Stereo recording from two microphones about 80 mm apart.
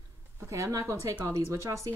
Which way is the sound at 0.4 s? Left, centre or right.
Right.